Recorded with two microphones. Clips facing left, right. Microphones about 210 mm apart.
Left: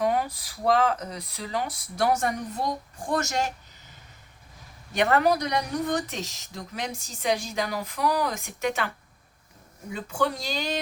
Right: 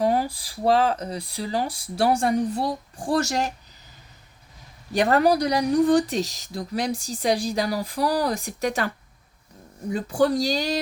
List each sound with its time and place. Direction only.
0.0 s speech: 30° right (ahead or behind)
4.9 s speech: 35° right (ahead or behind)
9.9 s speech: 35° right (ahead or behind)